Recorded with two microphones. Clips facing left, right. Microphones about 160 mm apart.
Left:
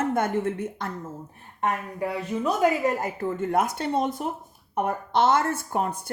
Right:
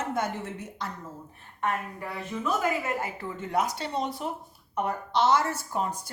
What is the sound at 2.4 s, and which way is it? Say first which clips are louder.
Speech: left 6 dB; 40° left (ahead or behind).